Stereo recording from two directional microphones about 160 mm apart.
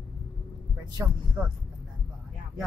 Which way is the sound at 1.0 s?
15° right (ahead or behind).